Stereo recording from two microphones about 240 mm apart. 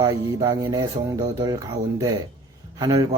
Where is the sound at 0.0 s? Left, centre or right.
Centre.